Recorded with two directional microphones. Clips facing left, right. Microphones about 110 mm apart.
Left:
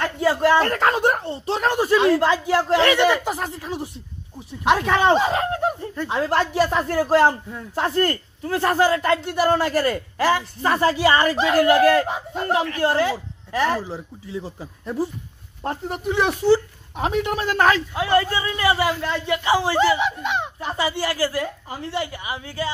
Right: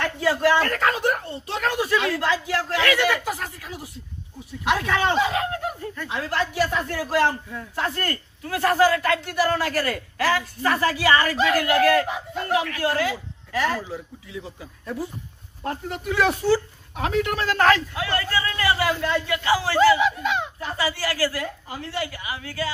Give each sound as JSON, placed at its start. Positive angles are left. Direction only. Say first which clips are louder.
{"t": 0.0, "sound": "speech", "louder": "left 2 dB", "side_deg": 30}
{"t": 15.6, "sound": "speech", "louder": "left 3 dB", "side_deg": 25}